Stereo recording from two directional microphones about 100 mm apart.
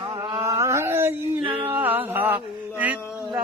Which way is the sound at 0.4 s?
30° right (ahead or behind).